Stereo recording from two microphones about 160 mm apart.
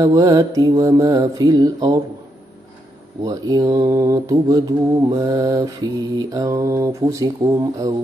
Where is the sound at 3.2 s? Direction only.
25° right (ahead or behind).